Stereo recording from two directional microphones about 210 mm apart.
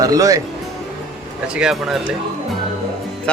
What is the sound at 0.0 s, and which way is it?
Speech, 15° right (ahead or behind).